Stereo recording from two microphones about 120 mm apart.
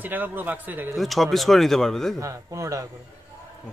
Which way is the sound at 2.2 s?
25° right (ahead or behind).